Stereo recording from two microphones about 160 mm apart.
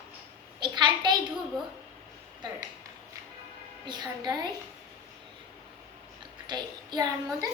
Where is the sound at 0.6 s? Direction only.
30° right (ahead or behind).